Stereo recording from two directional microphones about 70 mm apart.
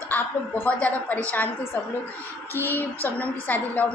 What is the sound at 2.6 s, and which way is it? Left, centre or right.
A woman's voice, left.